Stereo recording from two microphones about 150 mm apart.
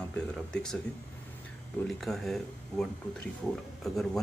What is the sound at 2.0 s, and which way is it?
A man's voice, centre (ahead or behind).